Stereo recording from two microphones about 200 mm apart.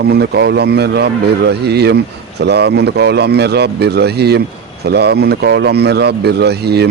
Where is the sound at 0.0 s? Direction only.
55° right (ahead or behind).